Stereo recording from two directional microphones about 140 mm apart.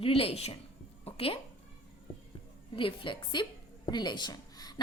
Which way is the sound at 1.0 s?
40° left (ahead or behind).